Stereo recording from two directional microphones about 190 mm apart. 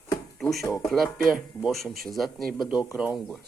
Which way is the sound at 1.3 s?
Centre (ahead or behind).